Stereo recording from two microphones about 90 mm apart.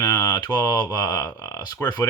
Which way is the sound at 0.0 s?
45° left (ahead or behind).